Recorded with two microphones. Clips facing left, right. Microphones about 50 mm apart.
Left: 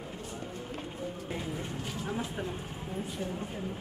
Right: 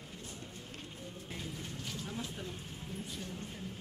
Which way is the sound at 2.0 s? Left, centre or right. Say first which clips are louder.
Left 10 dB; left.